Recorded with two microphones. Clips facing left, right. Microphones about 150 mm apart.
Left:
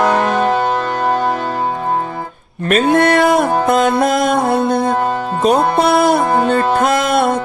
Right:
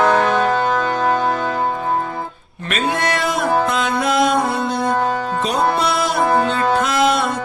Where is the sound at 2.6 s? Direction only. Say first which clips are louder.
Left 8 dB; 50° left (ahead or behind).